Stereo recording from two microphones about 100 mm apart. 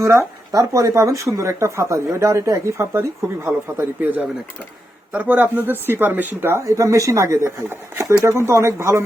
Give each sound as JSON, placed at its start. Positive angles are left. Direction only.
{"t": 0.0, "sound": "speech", "side_deg": -30}
{"t": 6.7, "sound": "speech", "side_deg": -30}